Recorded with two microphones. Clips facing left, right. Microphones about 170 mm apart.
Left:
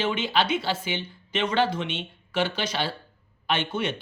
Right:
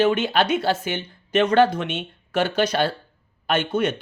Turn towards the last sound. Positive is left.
turn(degrees=-45)  # may be behind; listen again after turning